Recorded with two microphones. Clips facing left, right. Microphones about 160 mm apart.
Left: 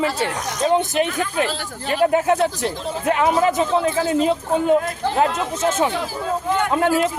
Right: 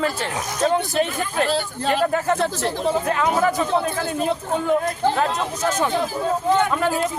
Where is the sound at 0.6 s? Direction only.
20° left (ahead or behind).